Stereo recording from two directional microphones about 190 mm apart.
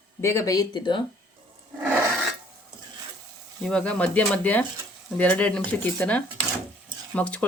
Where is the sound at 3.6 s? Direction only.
5° left (ahead or behind).